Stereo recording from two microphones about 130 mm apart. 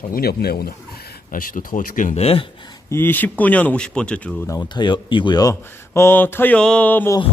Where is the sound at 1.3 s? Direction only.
90° left.